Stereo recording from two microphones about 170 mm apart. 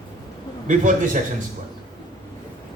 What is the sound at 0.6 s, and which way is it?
Speech, 50° right (ahead or behind).